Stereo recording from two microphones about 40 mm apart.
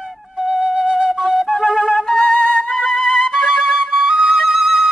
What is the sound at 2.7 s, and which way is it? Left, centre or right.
Flute, centre.